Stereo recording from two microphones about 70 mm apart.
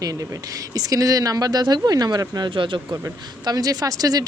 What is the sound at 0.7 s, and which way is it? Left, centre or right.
Speech, right.